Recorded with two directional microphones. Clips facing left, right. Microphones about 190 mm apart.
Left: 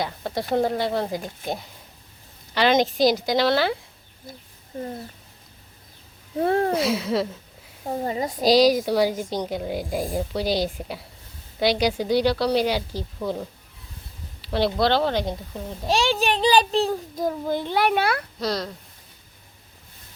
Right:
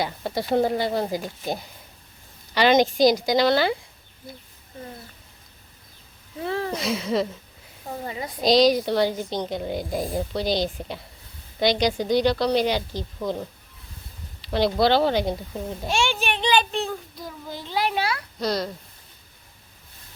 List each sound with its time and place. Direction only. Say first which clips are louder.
0.0 s speech: right 1 dB; centre (ahead or behind)
6.4 s speech: left 6 dB; 50° left (ahead or behind)
6.7 s speech: left 2 dB; 5° left (ahead or behind)
7.9 s a child's voice: left 6 dB; 35° left (ahead or behind)
8.4 s speech: even; 5° left (ahead or behind)
15.9 s a child's voice: left 4 dB; 35° left (ahead or behind)
17.2 s a child's voice: left 13 dB; 55° left (ahead or behind)
18.3 s speech: right 1 dB; centre (ahead or behind)